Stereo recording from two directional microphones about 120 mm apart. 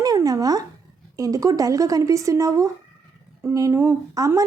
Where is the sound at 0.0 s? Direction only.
30° right (ahead or behind).